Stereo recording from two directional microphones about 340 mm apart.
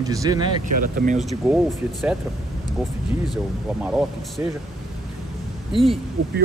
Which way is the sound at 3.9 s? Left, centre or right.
Centre.